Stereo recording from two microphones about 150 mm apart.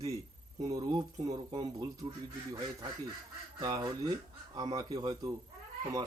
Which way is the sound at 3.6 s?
25° right (ahead or behind).